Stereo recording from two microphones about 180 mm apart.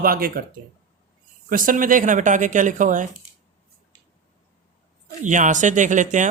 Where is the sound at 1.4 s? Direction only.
50° right (ahead or behind).